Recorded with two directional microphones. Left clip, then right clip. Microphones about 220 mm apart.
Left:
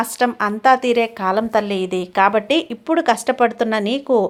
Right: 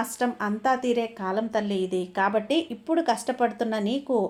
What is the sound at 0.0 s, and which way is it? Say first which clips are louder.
A woman's voice: left 9 dB; 25° left (ahead or behind).